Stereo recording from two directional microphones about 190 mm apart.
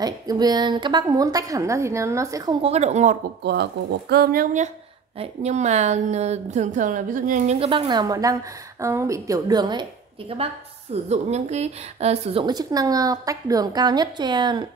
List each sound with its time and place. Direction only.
0.0 s a woman's voice: 20° right (ahead or behind)
2.6 s a woman's voice: 35° right (ahead or behind)
3.4 s a woman's voice: 60° right (ahead or behind); by 9.8 s 20° right (ahead or behind)
10.3 s a woman's voice: 35° right (ahead or behind)